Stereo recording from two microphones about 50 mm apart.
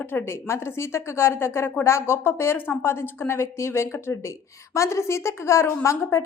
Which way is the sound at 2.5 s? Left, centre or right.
Left.